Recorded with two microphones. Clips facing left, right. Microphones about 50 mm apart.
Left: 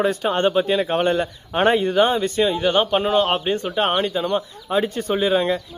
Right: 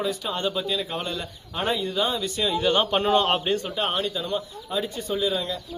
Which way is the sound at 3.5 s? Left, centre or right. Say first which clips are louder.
Left 5 dB; left.